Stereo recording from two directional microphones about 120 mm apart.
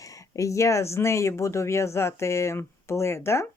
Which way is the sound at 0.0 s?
30° left (ahead or behind).